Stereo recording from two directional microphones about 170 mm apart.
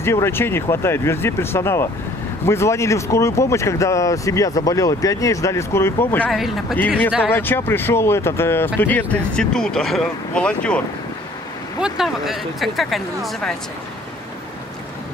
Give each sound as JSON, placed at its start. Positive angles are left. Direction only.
{"t": 0.0, "sound": "speech", "side_deg": 15}
{"t": 6.3, "sound": "speech", "side_deg": 0}
{"t": 7.3, "sound": "speech", "side_deg": 10}
{"t": 11.8, "sound": "speech", "side_deg": 0}